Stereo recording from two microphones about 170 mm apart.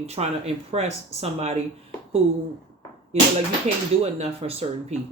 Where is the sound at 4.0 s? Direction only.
35° right (ahead or behind).